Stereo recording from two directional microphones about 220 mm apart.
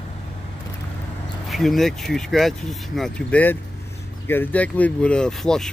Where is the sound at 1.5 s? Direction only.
Centre (ahead or behind).